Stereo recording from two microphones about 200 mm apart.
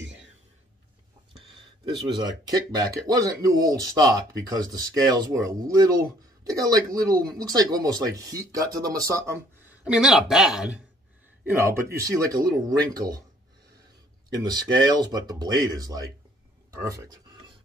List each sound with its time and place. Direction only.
0.0 s a sound: 65° right (ahead or behind)
1.9 s speech: 20° right (ahead or behind); by 10.8 s 5° right (ahead or behind)
11.6 s speech: 15° right (ahead or behind)
14.4 s speech: 20° right (ahead or behind)